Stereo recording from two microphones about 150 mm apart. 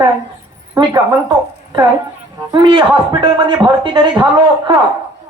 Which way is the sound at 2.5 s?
30° right (ahead or behind).